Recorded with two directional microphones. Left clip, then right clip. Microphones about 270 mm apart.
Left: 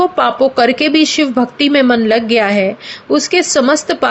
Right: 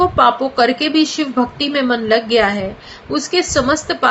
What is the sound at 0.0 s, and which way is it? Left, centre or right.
A woman's voice, left.